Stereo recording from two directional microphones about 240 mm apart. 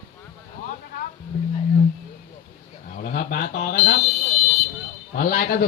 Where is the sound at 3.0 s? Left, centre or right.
Left.